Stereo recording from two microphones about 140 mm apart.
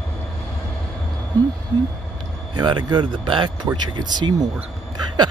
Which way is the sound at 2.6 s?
30° right (ahead or behind).